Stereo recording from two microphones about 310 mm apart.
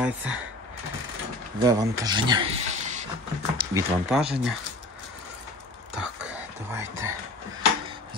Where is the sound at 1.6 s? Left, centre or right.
Centre.